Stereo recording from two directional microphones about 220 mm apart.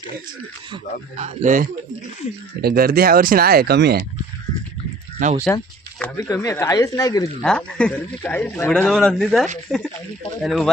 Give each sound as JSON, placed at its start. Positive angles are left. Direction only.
{"t": 0.7, "sound": "speech", "side_deg": -30}
{"t": 5.2, "sound": "speech", "side_deg": -35}
{"t": 6.0, "sound": "speech", "side_deg": 15}
{"t": 7.4, "sound": "speech", "side_deg": 5}